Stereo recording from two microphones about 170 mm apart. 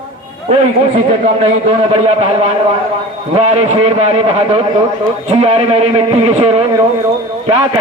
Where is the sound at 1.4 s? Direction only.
35° right (ahead or behind).